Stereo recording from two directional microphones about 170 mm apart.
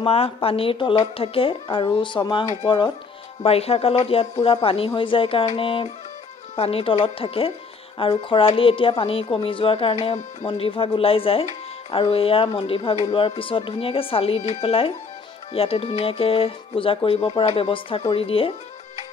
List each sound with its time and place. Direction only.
0.0 s speech: 35° left (ahead or behind)
3.4 s speech: 35° left (ahead or behind)